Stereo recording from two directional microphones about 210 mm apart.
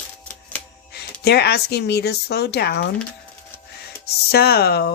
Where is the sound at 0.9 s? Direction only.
50° left (ahead or behind).